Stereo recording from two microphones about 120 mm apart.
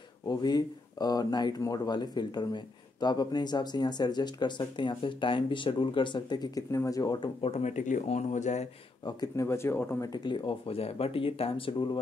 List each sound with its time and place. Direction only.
0.3 s speech: 35° left (ahead or behind)
7.2 s speech: 50° left (ahead or behind)
7.6 s speech: 90° left
9.0 s speech: 30° left (ahead or behind)